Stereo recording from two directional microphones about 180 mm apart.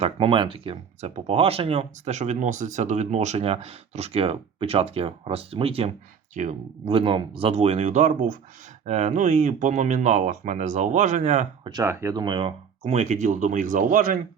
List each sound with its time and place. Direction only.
0.0 s speech: 30° right (ahead or behind)
6.3 s speech: 45° right (ahead or behind)
6.8 s speech: 30° right (ahead or behind)
11.6 s speech: 20° right (ahead or behind); by 14.2 s 50° right (ahead or behind)